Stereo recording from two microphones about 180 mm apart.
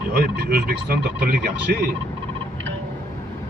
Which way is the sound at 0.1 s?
60° right (ahead or behind).